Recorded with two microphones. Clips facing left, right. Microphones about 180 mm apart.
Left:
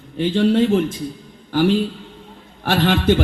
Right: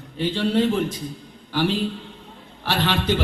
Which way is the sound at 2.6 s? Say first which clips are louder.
Left 6 dB; 50° left (ahead or behind).